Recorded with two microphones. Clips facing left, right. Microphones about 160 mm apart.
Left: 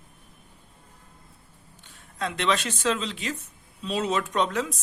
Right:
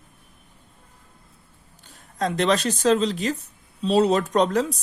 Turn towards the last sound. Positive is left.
turn(degrees=-35)  # may be behind; listen again after turning